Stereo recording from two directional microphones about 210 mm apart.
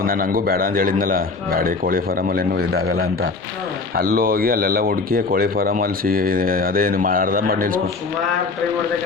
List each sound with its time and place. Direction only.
0.0 s speech: 40° right (ahead or behind)
4.1 s speech: 45° right (ahead or behind)